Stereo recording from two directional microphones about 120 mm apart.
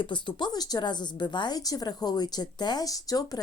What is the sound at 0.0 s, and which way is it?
Speech, 40° left (ahead or behind).